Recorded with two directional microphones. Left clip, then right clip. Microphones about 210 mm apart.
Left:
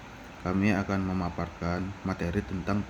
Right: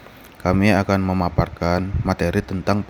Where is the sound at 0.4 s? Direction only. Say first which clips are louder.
Right 11 dB; 45° right (ahead or behind).